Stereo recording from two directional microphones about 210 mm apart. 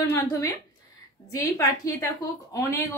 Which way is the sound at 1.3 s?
15° left (ahead or behind).